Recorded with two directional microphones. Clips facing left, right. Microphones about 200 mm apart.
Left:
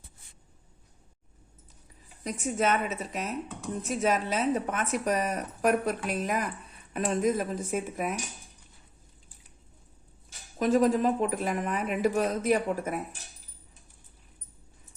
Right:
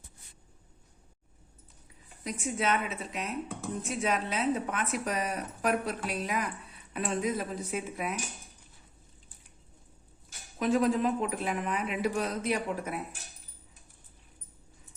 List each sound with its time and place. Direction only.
2.2 s speech: 45° left (ahead or behind)
3.6 s speech: centre (ahead or behind)
4.0 s speech: 45° left (ahead or behind)
10.6 s speech: 45° left (ahead or behind)